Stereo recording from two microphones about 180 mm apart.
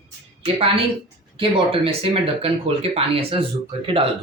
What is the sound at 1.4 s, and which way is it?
Speech, 30° right (ahead or behind).